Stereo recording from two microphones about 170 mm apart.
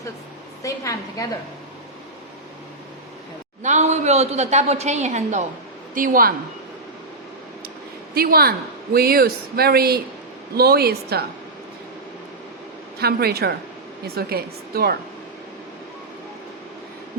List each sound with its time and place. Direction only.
0.6 s a woman's voice: 20° left (ahead or behind)
3.6 s a woman's voice: 45° right (ahead or behind)
5.9 s a woman's voice: 55° right (ahead or behind)
8.1 s a woman's voice: 60° right (ahead or behind)
13.0 s a woman's voice: 65° right (ahead or behind)